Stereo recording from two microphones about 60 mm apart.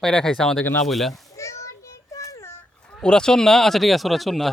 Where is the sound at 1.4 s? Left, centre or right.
Left.